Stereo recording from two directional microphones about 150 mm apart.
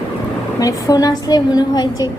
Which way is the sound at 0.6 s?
25° left (ahead or behind).